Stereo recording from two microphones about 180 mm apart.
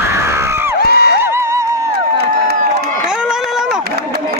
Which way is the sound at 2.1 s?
60° right (ahead or behind).